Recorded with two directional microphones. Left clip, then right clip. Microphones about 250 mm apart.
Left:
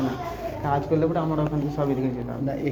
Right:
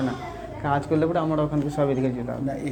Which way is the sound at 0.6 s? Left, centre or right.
Right.